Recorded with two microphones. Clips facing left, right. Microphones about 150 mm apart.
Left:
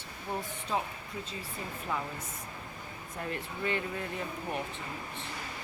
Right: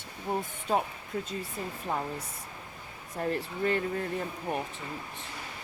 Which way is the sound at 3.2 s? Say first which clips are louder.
Right 6 dB; 40° right (ahead or behind).